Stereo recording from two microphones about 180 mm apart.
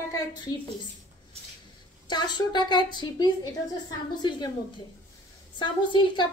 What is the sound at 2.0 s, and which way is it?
A woman's voice, 25° left (ahead or behind).